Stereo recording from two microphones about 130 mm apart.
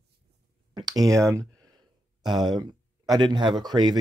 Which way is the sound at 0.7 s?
30° right (ahead or behind).